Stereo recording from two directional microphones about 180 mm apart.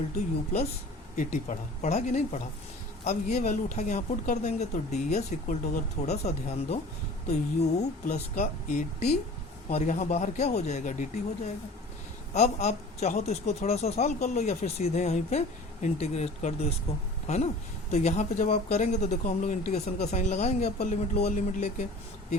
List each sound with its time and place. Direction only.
1.1 s speech: 45° left (ahead or behind)